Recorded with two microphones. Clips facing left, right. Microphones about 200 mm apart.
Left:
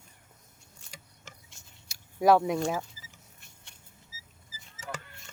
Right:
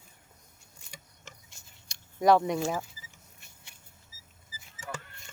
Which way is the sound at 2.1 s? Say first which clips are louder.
Left 1 dB; 5° left (ahead or behind).